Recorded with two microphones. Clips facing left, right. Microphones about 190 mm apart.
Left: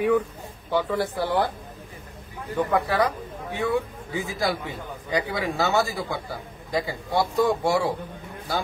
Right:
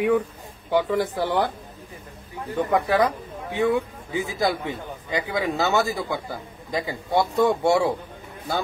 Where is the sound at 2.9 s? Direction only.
20° right (ahead or behind).